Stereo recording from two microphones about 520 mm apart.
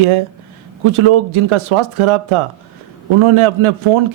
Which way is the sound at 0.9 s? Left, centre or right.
Right.